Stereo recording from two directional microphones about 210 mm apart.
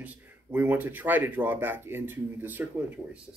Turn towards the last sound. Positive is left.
turn(degrees=-10)  # may be behind; listen again after turning